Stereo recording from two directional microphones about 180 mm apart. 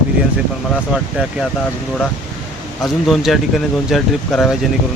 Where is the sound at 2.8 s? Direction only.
Centre (ahead or behind).